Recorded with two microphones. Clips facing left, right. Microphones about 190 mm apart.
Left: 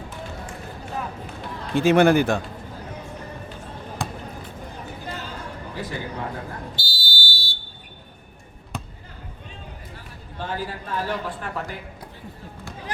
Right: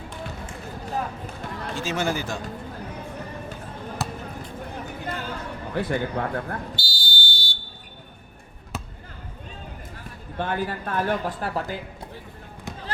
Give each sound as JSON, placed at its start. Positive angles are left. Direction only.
{"t": 1.7, "sound": "speech", "side_deg": 60}
{"t": 4.0, "sound": "basketball bounce", "side_deg": -5}
{"t": 5.7, "sound": "a man's voice", "side_deg": -60}
{"t": 6.7, "sound": "fire alarm", "side_deg": 0}
{"t": 8.7, "sound": "basketball bounce", "side_deg": -5}
{"t": 10.3, "sound": "a man's voice", "side_deg": -60}
{"t": 11.3, "sound": "speech", "side_deg": -35}